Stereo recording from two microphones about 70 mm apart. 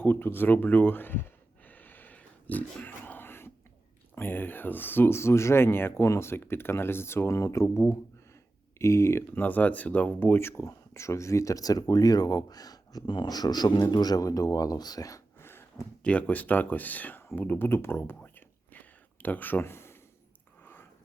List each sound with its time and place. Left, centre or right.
0.0 s a sound: left
4.1 s speech: left
7.3 s speech: left
8.8 s speech: left
9.4 s speech: left
10.6 s speech: left
15.4 s a sound: left
16.0 s speech: centre
17.7 s a sound: left